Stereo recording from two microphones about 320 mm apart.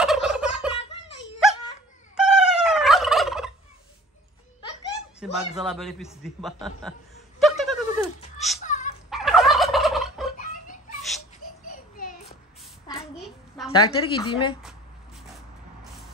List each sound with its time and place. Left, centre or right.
0.0 s gobble: centre
2.1 s gobble: centre
5.2 s a man's voice: centre
7.3 s a sound: centre
8.6 s dog: left
9.1 s gobble: centre
11.6 s a sound: left
13.7 s a woman's voice: centre
14.6 s a sound: centre